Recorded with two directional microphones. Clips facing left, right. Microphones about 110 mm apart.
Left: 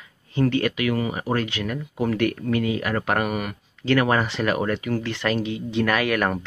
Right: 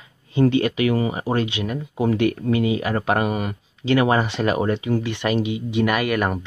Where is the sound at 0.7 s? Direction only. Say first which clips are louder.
Right 3 dB; 30° right (ahead or behind).